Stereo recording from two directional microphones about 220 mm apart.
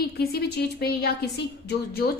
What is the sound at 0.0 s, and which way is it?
A woman's voice, 45° left (ahead or behind).